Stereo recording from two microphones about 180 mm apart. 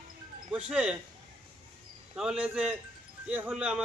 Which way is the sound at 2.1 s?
5° right (ahead or behind).